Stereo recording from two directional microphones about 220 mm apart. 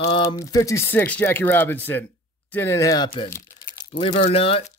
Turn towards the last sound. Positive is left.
turn(degrees=25)  # may be behind; listen again after turning